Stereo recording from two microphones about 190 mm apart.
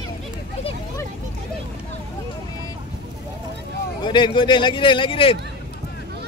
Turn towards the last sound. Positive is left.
turn(degrees=30)  # may be behind; listen again after turning